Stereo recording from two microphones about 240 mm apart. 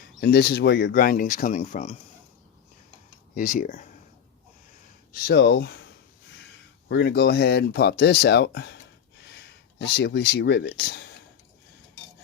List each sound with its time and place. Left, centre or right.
0.2 s speech: left
3.3 s speech: left
5.1 s speech: left
6.8 s speech: left